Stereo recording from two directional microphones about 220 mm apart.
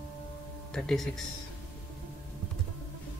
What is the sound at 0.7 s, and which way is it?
Speech, centre (ahead or behind).